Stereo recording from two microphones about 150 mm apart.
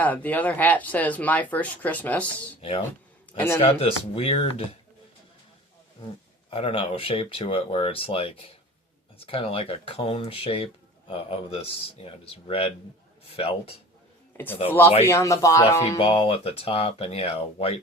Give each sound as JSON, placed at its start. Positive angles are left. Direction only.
{"t": 0.0, "sound": "speech", "side_deg": 10}
{"t": 2.6, "sound": "speech", "side_deg": 40}
{"t": 3.3, "sound": "speech", "side_deg": 15}
{"t": 3.6, "sound": "speech", "side_deg": 40}
{"t": 6.5, "sound": "speech", "side_deg": 40}
{"t": 14.3, "sound": "speech", "side_deg": 15}
{"t": 16.0, "sound": "speech", "side_deg": 40}